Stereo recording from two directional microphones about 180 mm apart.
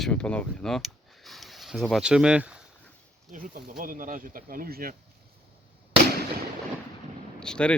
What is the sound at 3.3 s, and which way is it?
Speech, 50° right (ahead or behind).